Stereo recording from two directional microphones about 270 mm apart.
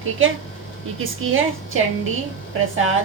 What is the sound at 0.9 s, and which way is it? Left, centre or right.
Speech, right.